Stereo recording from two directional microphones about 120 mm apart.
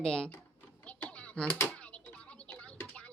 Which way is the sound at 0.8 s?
10° left (ahead or behind).